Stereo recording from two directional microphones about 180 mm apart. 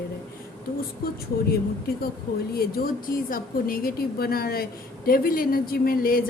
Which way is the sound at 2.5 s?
55° left (ahead or behind).